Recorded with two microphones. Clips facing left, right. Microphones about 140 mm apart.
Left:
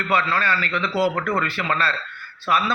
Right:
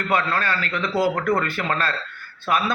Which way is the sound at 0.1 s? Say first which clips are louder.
Left 1 dB; 45° right (ahead or behind).